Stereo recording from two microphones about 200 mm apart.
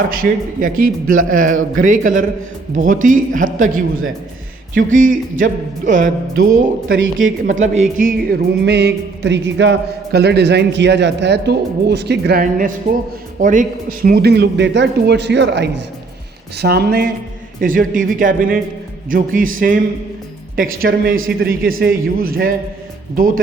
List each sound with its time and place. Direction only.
0.1 s a man's voice: 45° right (ahead or behind)